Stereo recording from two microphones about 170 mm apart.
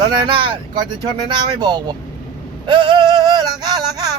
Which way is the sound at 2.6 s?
25° right (ahead or behind).